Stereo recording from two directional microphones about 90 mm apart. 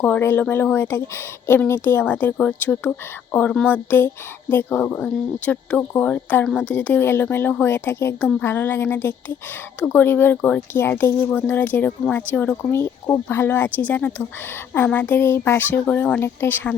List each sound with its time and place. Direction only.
0.0 s a woman's voice: 25° left (ahead or behind)
6.4 s a woman's voice: 10° left (ahead or behind); by 15.7 s 25° left (ahead or behind)
15.9 s speech: 15° left (ahead or behind)
16.2 s a woman's voice: 25° left (ahead or behind)